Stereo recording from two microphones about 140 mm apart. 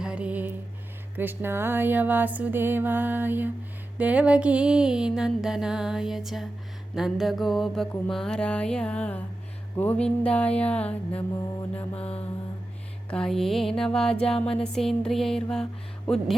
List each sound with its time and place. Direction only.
0.0 s music: 10° right (ahead or behind)
1.1 s a sound: 15° right (ahead or behind)
3.9 s music: 10° right (ahead or behind); by 11.2 s 10° left (ahead or behind)
11.9 s mantra: 45° left (ahead or behind)
13.1 s music: 5° left (ahead or behind)